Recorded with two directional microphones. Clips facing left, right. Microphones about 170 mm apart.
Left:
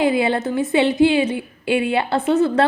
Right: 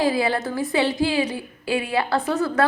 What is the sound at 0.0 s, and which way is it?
A woman's voice, 20° left (ahead or behind).